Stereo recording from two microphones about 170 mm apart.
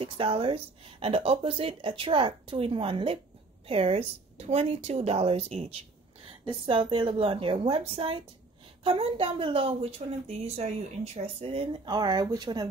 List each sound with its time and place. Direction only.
0.0 s a woman's voice: 35° right (ahead or behind)